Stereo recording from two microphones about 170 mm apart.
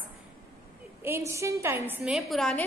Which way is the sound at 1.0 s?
15° right (ahead or behind).